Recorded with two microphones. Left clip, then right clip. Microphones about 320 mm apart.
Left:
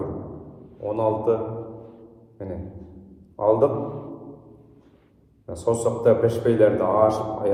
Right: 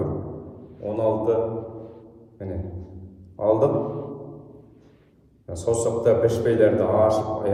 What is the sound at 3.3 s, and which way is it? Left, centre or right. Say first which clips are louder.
Speech: left 1 dB; centre.